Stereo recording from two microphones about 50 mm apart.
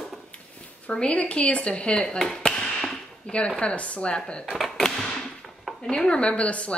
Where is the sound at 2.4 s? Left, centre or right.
Centre.